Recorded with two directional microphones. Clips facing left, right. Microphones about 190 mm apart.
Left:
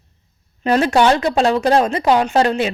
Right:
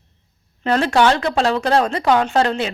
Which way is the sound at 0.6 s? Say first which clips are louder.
Left 2 dB; 15° left (ahead or behind).